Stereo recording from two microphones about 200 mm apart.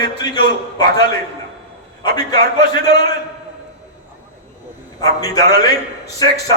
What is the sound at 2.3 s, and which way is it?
Speech, 20° left (ahead or behind).